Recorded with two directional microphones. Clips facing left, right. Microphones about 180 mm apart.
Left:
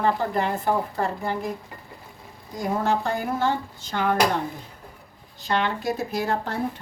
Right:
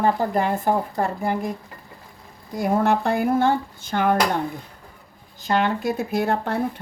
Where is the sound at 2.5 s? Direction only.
60° right (ahead or behind).